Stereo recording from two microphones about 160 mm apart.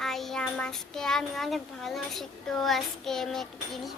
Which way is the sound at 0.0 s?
Centre (ahead or behind).